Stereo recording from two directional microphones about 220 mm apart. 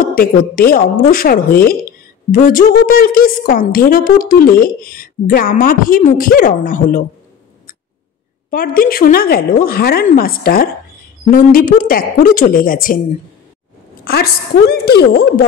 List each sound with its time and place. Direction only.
0.0 s a woman's voice: 40° left (ahead or behind)
8.5 s a woman's voice: 40° left (ahead or behind)
14.0 s a woman's voice: 45° left (ahead or behind)